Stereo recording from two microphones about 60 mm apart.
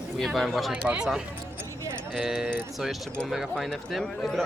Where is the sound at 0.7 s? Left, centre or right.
Right.